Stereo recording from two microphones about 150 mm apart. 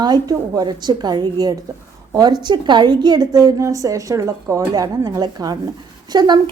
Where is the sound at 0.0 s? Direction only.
25° right (ahead or behind).